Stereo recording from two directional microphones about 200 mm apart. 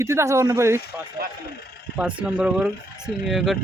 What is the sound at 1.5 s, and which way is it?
Vehicle, 50° left (ahead or behind).